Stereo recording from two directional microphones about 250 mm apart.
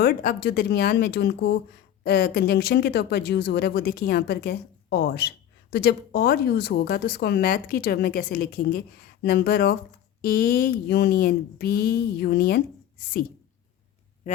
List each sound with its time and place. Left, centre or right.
0.0 s speech: left